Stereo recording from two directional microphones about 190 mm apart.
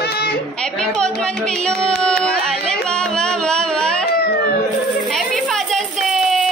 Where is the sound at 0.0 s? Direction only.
55° left (ahead or behind).